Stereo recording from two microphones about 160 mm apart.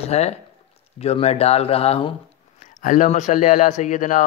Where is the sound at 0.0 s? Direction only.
40° left (ahead or behind).